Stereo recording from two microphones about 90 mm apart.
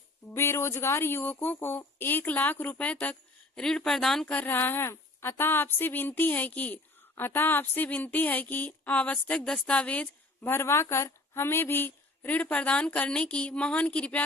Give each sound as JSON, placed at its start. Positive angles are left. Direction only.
{"t": 0.3, "sound": "a woman's voice", "side_deg": 30}
{"t": 4.3, "sound": "a woman's voice", "side_deg": 20}
{"t": 7.2, "sound": "a sound", "side_deg": 25}